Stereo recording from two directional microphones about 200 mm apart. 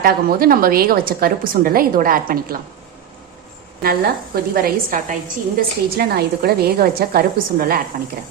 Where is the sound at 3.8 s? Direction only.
50° right (ahead or behind).